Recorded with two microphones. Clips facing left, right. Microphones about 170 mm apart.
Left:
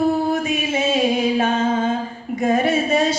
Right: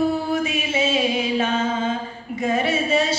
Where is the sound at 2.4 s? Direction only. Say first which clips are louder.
Left 4 dB; 50° left (ahead or behind).